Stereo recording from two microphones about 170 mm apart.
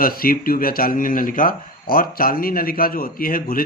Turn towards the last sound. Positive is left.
turn(degrees=60)  # may be behind; listen again after turning